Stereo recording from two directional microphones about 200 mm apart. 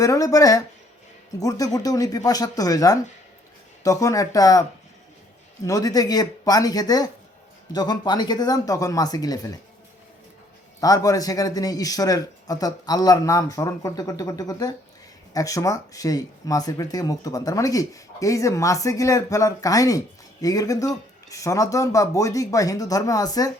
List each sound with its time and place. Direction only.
0.0 s speech: 15° left (ahead or behind)
5.6 s speech: 15° left (ahead or behind)
10.8 s speech: 15° left (ahead or behind)